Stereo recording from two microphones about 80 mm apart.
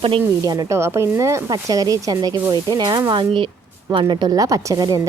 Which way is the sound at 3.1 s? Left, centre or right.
Right.